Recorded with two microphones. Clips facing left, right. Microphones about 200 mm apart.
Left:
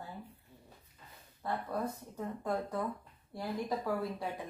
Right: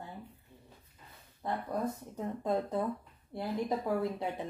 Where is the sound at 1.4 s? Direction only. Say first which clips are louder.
Right 2 dB; 20° right (ahead or behind).